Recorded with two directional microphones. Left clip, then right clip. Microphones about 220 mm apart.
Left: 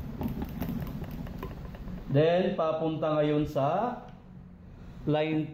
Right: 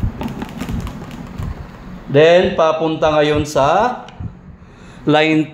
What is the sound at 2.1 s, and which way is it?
Speech, 45° right (ahead or behind).